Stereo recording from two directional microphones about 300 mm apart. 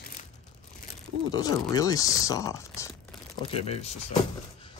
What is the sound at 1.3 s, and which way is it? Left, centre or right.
Speech, centre.